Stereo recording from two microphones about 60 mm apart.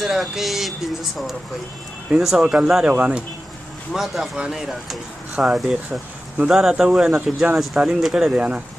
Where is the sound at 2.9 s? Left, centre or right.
Right.